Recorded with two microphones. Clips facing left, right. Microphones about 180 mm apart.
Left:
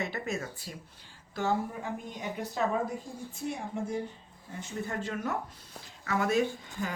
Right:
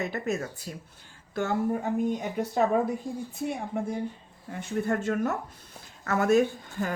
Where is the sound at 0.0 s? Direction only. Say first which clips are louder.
Right 4 dB; 40° right (ahead or behind).